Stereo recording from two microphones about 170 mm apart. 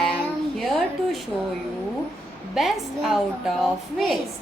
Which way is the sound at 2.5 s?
Centre (ahead or behind).